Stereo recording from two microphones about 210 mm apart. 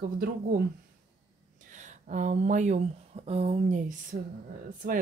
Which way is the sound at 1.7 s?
35° right (ahead or behind).